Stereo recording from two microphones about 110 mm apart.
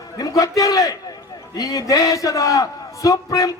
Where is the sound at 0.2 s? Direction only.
30° left (ahead or behind).